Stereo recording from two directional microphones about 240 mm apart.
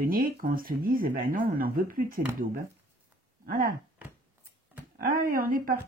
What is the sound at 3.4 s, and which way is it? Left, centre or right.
Speech, right.